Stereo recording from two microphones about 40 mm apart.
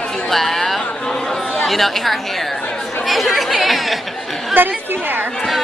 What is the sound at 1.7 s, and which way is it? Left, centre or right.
Speech, centre.